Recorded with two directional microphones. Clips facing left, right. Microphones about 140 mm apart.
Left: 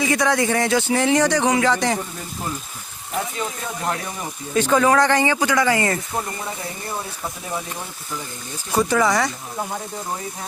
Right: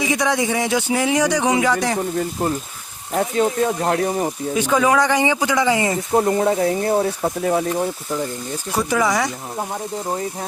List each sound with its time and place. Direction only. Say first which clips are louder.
0.0 s speech: even; 15° right (ahead or behind)
3.2 s speech: right 9 dB; 55° right (ahead or behind)
4.5 s speech: left 1 dB; 10° right (ahead or behind)
6.1 s speech: right 11 dB; 70° right (ahead or behind)
8.9 s speech: right 1 dB; 10° right (ahead or behind)